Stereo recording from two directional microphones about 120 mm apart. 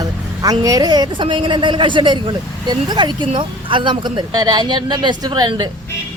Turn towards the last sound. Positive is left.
turn(degrees=-40)  # may be behind; listen again after turning